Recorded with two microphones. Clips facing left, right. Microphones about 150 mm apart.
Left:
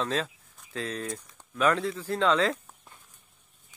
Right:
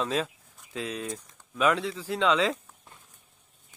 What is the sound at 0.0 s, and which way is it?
Speech, 10° right (ahead or behind).